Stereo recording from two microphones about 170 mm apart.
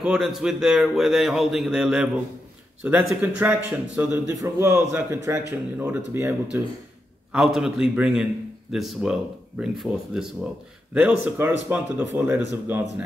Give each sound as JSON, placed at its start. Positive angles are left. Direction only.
{"t": 0.0, "sound": "a man's voice", "side_deg": -5}